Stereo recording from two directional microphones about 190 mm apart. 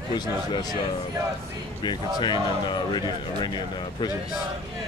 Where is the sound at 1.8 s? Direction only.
25° left (ahead or behind).